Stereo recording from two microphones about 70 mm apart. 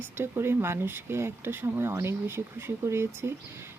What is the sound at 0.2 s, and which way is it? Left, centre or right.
Speech, right.